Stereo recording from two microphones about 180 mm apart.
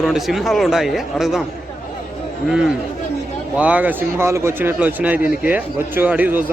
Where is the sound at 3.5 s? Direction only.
10° right (ahead or behind).